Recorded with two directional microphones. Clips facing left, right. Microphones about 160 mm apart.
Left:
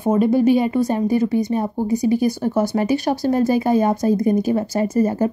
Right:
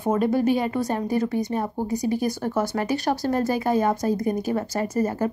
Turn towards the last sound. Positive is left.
turn(degrees=20)  # may be behind; listen again after turning